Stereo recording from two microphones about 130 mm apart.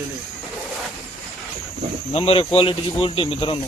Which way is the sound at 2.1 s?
45° left (ahead or behind).